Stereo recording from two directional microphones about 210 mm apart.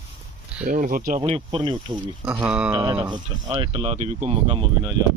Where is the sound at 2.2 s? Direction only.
5° right (ahead or behind).